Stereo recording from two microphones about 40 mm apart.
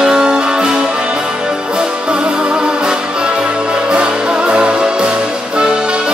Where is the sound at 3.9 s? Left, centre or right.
Right.